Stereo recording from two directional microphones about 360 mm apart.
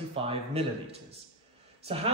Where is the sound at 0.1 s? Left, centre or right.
Centre.